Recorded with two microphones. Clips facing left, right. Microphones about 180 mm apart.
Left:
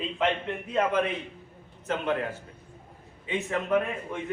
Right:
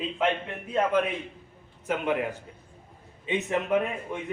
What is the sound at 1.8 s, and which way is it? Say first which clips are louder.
A man's voice: right 1 dB; 10° right (ahead or behind).